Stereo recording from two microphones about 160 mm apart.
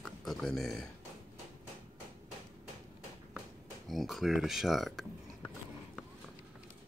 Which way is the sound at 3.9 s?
Centre (ahead or behind).